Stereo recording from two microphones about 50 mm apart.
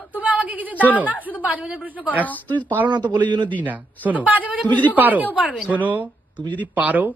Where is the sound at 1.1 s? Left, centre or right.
Left.